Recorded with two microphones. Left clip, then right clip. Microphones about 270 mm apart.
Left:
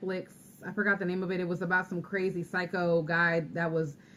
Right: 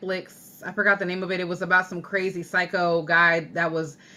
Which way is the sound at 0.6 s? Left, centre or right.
Centre.